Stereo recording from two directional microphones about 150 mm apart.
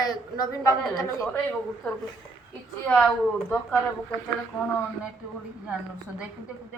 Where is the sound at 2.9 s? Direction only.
5° left (ahead or behind).